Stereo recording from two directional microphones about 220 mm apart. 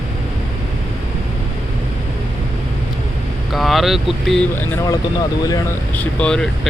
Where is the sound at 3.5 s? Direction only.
Centre (ahead or behind).